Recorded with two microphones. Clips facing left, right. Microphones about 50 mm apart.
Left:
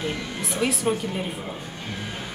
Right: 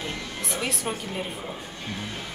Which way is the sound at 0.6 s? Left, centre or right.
Centre.